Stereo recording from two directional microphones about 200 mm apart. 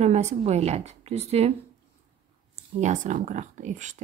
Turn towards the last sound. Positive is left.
turn(degrees=-35)  # may be behind; listen again after turning